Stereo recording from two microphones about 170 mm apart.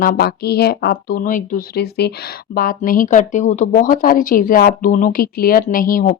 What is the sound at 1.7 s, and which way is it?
A woman's voice, 70° left (ahead or behind).